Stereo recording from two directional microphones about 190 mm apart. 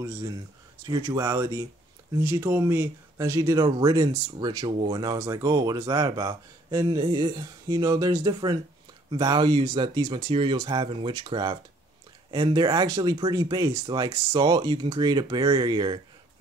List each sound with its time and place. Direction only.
0.8 s speech: 20° right (ahead or behind)